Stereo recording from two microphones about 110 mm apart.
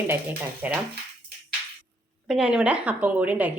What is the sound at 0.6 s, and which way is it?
Speech, 15° right (ahead or behind).